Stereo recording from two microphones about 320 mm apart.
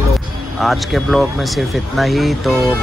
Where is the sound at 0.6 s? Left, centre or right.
Centre.